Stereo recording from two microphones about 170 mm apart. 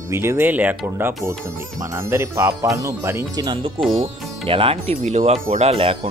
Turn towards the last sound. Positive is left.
turn(degrees=-35)  # may be behind; listen again after turning